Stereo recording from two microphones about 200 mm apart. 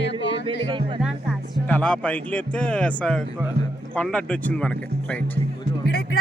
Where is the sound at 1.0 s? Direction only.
5° left (ahead or behind).